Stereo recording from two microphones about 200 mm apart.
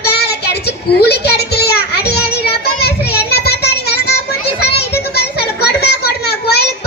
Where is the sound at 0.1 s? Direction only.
55° left (ahead or behind).